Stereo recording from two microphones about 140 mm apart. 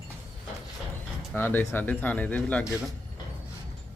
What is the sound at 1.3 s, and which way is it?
Speech, 15° left (ahead or behind).